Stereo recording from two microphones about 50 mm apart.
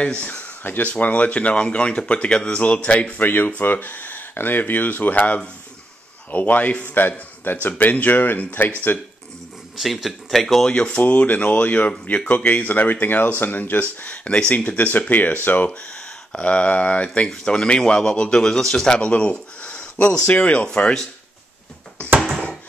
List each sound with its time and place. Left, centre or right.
0.0 s a man's voice: left
3.2 s speech: left
6.9 s a man's voice: left
10.0 s speech: centre
10.7 s a man's voice: left
15.9 s a man's voice: centre